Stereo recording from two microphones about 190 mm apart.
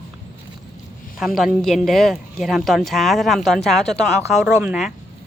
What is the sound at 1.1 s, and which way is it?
A woman's voice, centre (ahead or behind).